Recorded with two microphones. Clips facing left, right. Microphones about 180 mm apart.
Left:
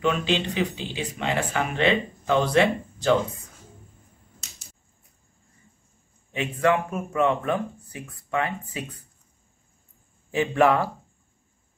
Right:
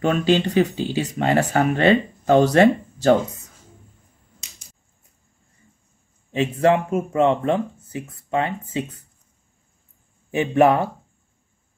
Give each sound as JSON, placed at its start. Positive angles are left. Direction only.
{"t": 0.0, "sound": "speech", "side_deg": -45}
{"t": 6.3, "sound": "speech", "side_deg": -30}
{"t": 10.3, "sound": "speech", "side_deg": -20}